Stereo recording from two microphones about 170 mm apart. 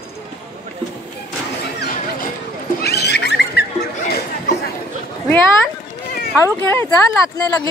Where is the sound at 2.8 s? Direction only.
70° left (ahead or behind).